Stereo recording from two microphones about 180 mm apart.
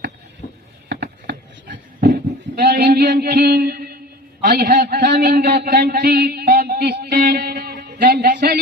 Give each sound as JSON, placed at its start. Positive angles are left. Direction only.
{"t": 0.4, "sound": "a sound", "side_deg": 45}
{"t": 0.9, "sound": "sheep", "side_deg": -65}
{"t": 4.4, "sound": "a man's voice", "side_deg": -55}